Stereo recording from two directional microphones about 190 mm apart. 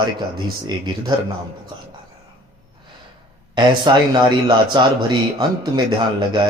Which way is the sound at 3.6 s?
25° right (ahead or behind).